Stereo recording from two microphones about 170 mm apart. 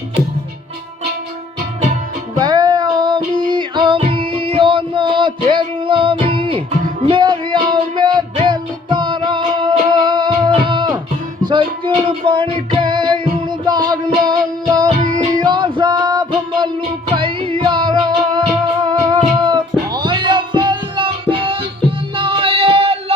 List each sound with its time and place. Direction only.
2.4 s a sound: 25° right (ahead or behind)
3.4 s music: 25° right (ahead or behind)
12.0 s music: 30° right (ahead or behind)
15.0 s music: 50° right (ahead or behind)
15.4 s music: 25° right (ahead or behind)